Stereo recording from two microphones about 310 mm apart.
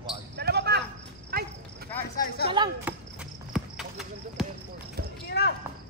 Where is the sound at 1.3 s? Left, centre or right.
Right.